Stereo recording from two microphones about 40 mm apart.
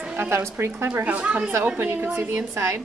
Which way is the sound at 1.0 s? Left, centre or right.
Right.